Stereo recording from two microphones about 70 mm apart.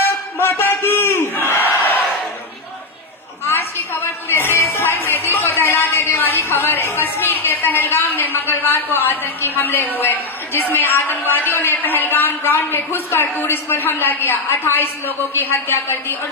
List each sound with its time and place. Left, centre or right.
0.3 s battle cry: left
3.4 s music: left
9.0 s a woman's voice: left